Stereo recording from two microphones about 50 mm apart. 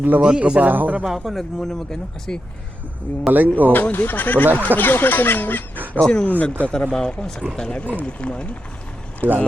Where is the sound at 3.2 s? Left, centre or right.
Right.